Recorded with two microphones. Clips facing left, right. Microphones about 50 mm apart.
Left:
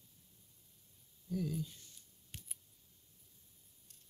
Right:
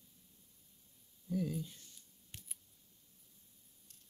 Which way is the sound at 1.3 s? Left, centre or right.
Centre.